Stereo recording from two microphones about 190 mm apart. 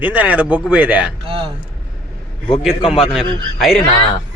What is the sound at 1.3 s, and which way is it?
Speech, 30° right (ahead or behind).